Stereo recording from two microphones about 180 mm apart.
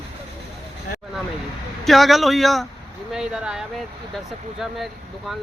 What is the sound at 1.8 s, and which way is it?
Speech, centre (ahead or behind).